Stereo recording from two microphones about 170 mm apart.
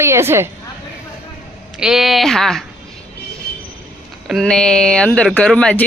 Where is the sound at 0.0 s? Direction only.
15° right (ahead or behind).